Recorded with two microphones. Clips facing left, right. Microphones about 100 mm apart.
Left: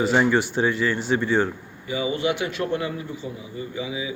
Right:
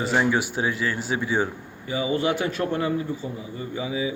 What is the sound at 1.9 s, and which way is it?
A man's voice, 35° right (ahead or behind).